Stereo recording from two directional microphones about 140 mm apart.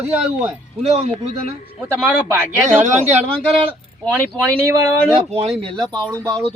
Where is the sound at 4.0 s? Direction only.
10° left (ahead or behind).